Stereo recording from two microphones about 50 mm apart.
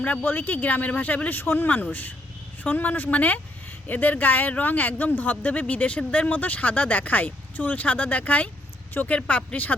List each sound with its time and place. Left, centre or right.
0.0 s speech: left